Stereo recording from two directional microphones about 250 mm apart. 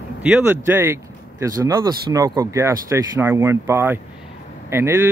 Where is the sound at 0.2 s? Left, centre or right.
Centre.